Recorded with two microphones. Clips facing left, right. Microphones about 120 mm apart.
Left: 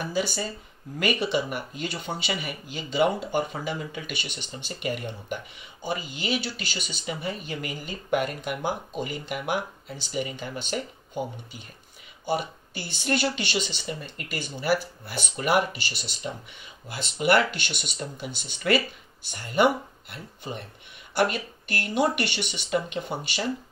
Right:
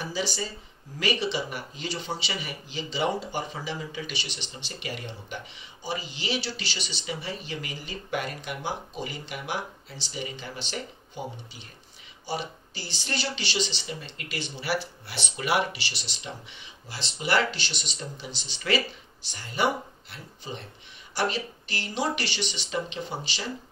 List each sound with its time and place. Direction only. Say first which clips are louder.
0.0 s speech: left 3 dB; 55° left (ahead or behind)